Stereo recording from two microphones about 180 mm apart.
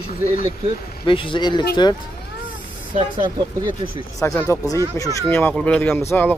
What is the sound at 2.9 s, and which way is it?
Speech, 25° right (ahead or behind).